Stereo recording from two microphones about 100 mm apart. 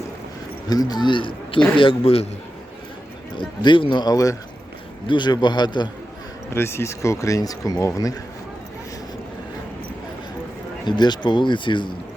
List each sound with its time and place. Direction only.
0.7 s a man's voice: 40° left (ahead or behind); by 2.3 s 75° left (ahead or behind)
3.3 s speech: 55° left (ahead or behind); by 4.4 s 35° left (ahead or behind)
5.0 s speech: 50° left (ahead or behind)
6.5 s speech: 25° left (ahead or behind)
10.8 s speech: 45° left (ahead or behind)